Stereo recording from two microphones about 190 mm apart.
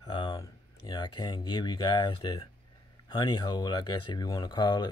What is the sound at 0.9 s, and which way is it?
Speech, 25° left (ahead or behind).